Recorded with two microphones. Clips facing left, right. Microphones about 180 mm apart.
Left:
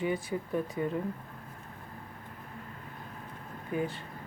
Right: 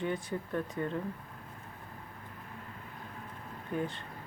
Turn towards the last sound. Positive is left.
turn(degrees=10)  # may be behind; listen again after turning